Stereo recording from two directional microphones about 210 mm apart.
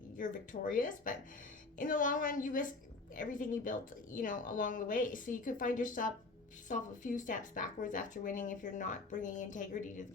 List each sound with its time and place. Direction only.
0.2 s speech: 40° left (ahead or behind)